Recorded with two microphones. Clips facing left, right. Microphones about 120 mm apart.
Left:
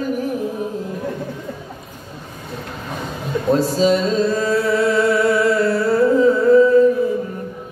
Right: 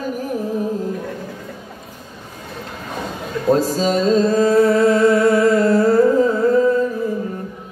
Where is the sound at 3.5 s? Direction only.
40° right (ahead or behind).